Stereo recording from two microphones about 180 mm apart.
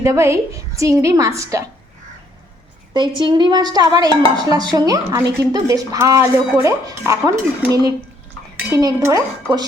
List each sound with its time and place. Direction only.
0.0 s a woman's voice: 15° right (ahead or behind)
2.9 s a woman's voice: 25° right (ahead or behind)